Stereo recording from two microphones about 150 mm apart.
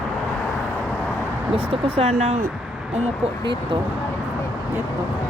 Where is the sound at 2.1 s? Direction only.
55° right (ahead or behind).